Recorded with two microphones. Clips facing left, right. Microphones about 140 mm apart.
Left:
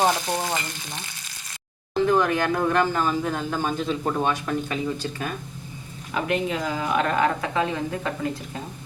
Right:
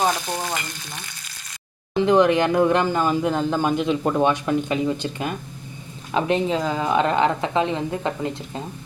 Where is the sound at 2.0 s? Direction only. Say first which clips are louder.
Right 5 dB; 15° right (ahead or behind).